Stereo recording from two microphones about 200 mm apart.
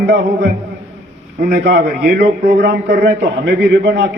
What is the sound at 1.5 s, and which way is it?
A man's voice, 50° right (ahead or behind).